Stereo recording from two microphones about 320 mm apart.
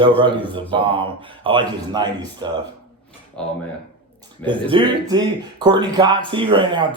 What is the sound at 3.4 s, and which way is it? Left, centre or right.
Speech, centre.